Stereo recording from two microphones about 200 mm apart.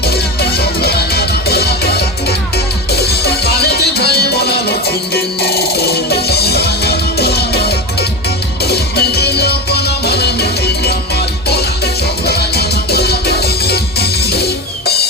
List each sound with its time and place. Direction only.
0.6 s music: 50° left (ahead or behind)
2.9 s music: 55° left (ahead or behind)
12.2 s music: 50° left (ahead or behind)